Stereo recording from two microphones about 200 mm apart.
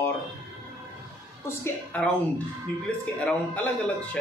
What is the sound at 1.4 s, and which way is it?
Speech, 10° left (ahead or behind).